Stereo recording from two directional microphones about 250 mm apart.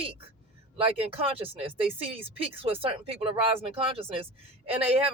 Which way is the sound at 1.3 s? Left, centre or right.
Right.